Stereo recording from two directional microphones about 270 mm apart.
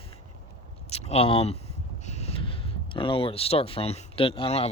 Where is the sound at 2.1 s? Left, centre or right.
Left.